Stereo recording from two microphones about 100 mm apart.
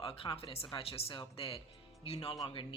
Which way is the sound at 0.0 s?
70° left (ahead or behind).